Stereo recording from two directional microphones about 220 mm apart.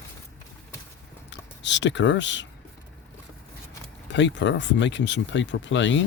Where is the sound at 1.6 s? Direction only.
55° left (ahead or behind).